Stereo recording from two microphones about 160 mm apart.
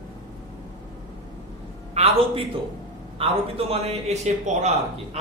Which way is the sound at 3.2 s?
40° right (ahead or behind).